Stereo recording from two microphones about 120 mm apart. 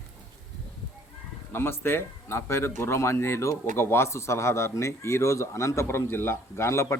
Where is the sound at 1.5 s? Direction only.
20° left (ahead or behind).